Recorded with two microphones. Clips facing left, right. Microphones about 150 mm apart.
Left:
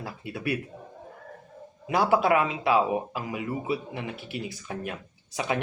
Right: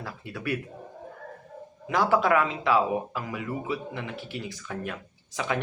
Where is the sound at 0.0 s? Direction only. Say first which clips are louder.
Left 2 dB; 15° left (ahead or behind).